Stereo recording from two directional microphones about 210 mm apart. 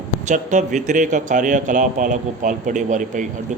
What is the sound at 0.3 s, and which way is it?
Speech, 35° right (ahead or behind).